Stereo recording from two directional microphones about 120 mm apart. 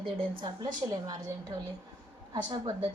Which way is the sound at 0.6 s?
30° right (ahead or behind).